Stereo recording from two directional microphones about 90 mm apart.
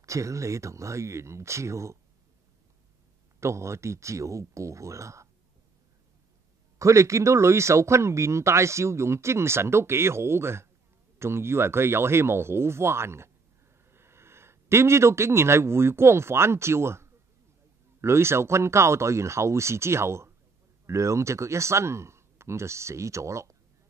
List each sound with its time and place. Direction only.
0.0 s speech: 35° right (ahead or behind)
3.3 s speech: 30° right (ahead or behind)
6.8 s speech: 35° right (ahead or behind)